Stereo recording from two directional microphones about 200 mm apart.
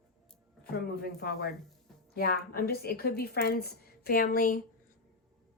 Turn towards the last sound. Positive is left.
turn(degrees=45)  # may be behind; listen again after turning